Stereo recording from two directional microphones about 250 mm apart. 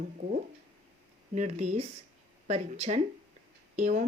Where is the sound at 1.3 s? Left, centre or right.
Right.